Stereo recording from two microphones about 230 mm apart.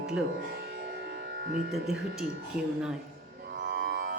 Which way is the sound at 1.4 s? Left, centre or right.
Right.